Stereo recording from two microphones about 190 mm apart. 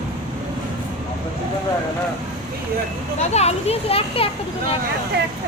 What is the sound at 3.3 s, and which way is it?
A child's voice, 35° left (ahead or behind).